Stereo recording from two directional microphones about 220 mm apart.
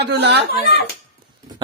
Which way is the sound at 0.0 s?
50° right (ahead or behind).